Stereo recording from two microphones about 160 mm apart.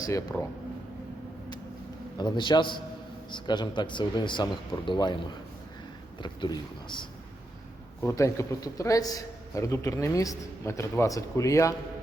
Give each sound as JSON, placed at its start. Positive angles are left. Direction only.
{"t": 0.0, "sound": "a man's voice", "side_deg": 20}
{"t": 2.1, "sound": "a man's voice", "side_deg": 30}
{"t": 8.0, "sound": "a man's voice", "side_deg": 20}